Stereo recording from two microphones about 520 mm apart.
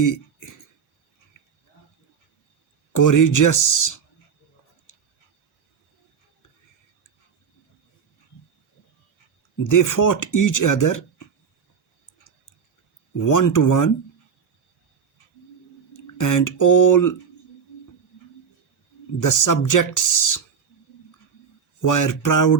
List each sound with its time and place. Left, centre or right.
0.0 s a sound: left
2.9 s speech: left
9.6 s speech: left
13.1 s speech: left
15.9 s speech: left
19.2 s speech: left
21.8 s speech: left